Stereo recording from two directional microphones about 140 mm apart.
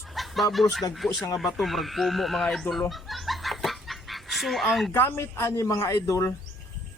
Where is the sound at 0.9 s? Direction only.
Centre (ahead or behind).